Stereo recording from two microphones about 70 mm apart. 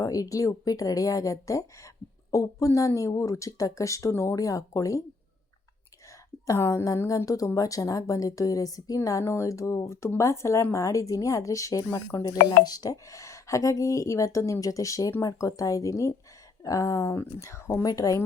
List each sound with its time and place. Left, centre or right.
0.0 s a woman's voice: left
6.4 s a woman's voice: left
7.3 s a woman's voice: left
12.1 s speech: left
17.8 s a woman's voice: left